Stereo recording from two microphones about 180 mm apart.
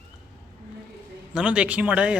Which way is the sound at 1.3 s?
5° right (ahead or behind).